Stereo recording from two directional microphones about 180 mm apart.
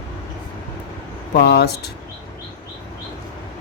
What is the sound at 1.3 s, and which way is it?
Speech, 60° left (ahead or behind).